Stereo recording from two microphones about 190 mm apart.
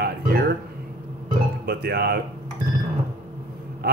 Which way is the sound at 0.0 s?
55° right (ahead or behind).